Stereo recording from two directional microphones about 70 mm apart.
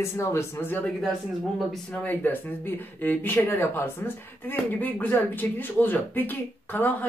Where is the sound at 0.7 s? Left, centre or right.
Centre.